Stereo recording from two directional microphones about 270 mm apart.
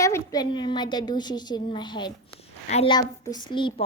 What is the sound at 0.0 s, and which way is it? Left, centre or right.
A woman's voice, centre.